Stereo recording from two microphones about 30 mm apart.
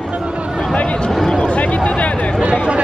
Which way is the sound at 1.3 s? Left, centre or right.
Left.